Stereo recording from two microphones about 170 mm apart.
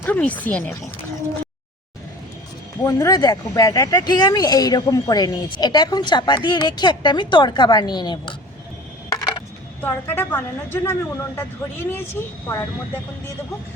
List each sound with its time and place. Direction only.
0.0 s speech: 10° left (ahead or behind)
2.8 s speech: 20° left (ahead or behind)
9.0 s a sound: 25° left (ahead or behind)
9.8 s speech: 10° left (ahead or behind)